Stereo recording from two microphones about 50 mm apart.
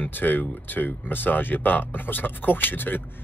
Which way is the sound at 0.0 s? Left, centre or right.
Left.